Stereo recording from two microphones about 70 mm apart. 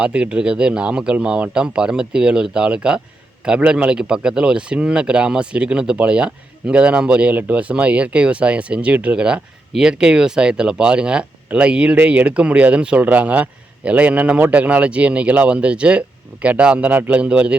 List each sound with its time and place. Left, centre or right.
0.0 s speech: centre